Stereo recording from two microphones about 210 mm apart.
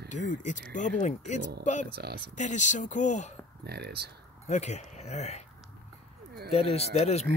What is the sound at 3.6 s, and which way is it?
Speech, 50° right (ahead or behind).